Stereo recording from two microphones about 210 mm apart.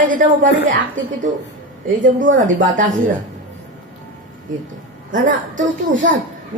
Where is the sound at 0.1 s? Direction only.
40° right (ahead or behind).